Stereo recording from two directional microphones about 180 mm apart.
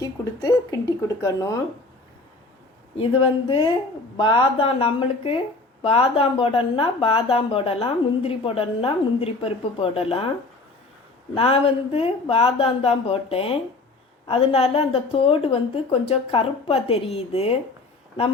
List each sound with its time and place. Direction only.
0.0 s speech: 20° left (ahead or behind)
3.0 s a woman's voice: 30° left (ahead or behind)
11.3 s a woman's voice: 30° left (ahead or behind)